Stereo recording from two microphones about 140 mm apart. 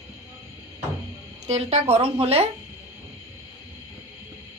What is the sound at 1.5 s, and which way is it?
Speech, 50° right (ahead or behind).